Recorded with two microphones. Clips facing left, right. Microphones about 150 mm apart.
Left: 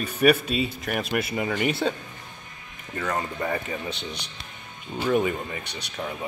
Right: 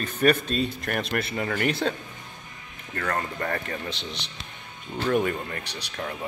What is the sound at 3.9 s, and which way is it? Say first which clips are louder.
Speech: left 1 dB; 30° right (ahead or behind).